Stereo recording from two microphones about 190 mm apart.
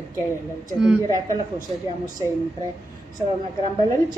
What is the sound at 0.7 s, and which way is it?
Speech, 5° right (ahead or behind).